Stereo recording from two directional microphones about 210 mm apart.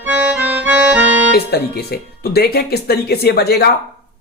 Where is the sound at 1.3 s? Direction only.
50° left (ahead or behind).